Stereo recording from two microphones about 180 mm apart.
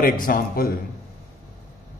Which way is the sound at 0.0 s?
50° left (ahead or behind).